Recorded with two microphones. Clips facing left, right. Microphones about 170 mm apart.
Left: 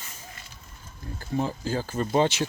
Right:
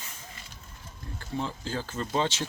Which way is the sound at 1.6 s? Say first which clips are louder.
Left 5 dB; 10° left (ahead or behind).